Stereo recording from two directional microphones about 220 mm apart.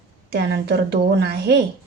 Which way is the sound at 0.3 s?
50° right (ahead or behind).